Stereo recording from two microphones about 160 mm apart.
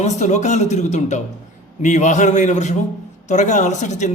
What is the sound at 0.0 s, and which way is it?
A man's voice, 45° left (ahead or behind).